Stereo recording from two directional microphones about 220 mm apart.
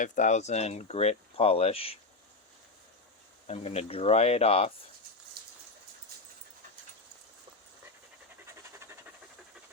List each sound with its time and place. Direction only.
0.0 s speech: 35° left (ahead or behind)
3.4 s speech: 30° left (ahead or behind)
5.4 s a sound: 45° right (ahead or behind)
8.4 s pant: 10° right (ahead or behind)